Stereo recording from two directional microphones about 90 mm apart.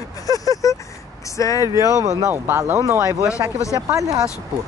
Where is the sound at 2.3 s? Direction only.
25° right (ahead or behind).